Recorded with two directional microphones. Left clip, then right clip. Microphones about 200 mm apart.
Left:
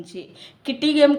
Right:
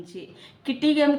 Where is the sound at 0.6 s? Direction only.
40° left (ahead or behind).